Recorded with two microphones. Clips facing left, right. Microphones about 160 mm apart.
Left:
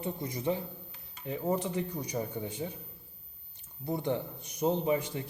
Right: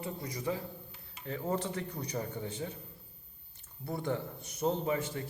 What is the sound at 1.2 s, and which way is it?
A man's voice, 15° left (ahead or behind).